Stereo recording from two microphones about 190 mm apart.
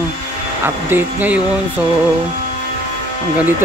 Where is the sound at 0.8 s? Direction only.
10° right (ahead or behind).